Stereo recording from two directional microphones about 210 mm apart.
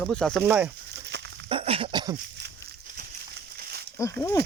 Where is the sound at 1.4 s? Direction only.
25° right (ahead or behind).